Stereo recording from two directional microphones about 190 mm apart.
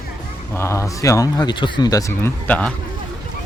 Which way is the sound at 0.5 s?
15° left (ahead or behind).